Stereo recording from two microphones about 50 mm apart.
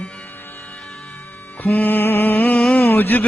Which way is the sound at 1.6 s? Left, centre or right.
Left.